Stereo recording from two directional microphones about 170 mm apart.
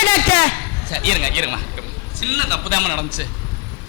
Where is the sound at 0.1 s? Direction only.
15° left (ahead or behind).